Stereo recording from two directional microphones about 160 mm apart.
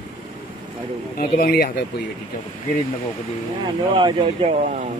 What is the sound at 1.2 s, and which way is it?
Speech, 70° left (ahead or behind).